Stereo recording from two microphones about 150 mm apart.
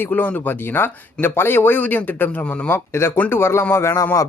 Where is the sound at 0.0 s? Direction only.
10° left (ahead or behind).